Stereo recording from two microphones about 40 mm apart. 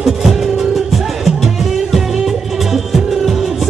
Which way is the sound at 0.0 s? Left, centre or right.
Centre.